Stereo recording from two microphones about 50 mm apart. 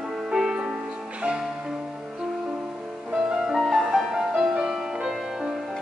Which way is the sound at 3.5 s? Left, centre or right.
Centre.